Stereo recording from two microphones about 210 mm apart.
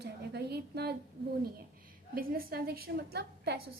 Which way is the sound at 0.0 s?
50° right (ahead or behind).